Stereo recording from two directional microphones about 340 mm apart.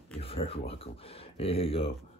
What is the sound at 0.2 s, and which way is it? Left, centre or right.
Speech, centre.